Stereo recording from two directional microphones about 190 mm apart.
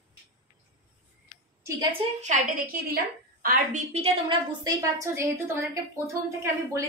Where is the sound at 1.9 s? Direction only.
40° right (ahead or behind).